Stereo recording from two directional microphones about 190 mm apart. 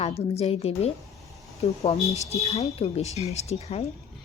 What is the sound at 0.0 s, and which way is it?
Speech, 30° left (ahead or behind).